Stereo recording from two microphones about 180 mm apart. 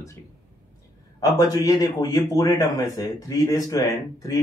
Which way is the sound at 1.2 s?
20° left (ahead or behind).